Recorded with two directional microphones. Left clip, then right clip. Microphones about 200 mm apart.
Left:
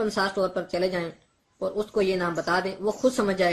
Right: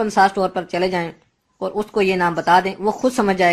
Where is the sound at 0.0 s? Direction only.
30° right (ahead or behind).